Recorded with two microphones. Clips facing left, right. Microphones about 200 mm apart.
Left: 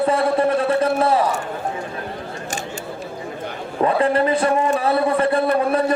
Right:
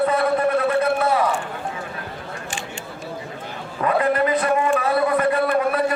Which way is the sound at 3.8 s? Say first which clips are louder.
Left 2 dB; 30° left (ahead or behind).